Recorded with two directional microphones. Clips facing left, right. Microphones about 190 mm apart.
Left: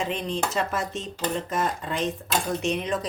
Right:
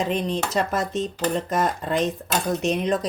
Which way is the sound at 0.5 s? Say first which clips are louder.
Right 4 dB; 40° right (ahead or behind).